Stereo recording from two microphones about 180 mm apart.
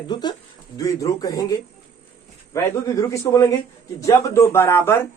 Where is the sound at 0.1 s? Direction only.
25° left (ahead or behind).